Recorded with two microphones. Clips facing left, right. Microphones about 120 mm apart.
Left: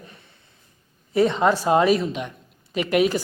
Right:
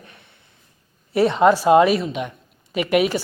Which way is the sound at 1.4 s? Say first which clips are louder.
Right 7 dB; 15° right (ahead or behind).